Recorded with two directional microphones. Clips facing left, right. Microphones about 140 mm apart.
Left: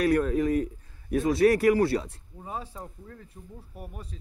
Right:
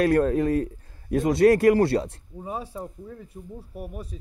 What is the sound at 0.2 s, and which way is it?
Speech, 35° right (ahead or behind).